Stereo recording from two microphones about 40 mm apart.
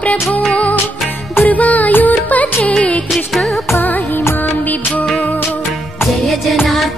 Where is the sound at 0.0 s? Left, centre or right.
Left.